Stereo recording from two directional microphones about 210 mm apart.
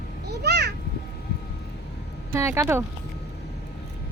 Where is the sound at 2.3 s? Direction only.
15° right (ahead or behind).